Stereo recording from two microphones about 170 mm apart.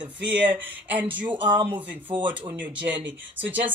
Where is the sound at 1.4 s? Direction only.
30° right (ahead or behind).